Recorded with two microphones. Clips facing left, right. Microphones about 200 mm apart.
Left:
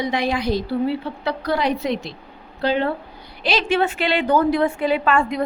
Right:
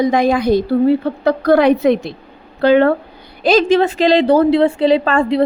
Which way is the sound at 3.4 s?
45° right (ahead or behind).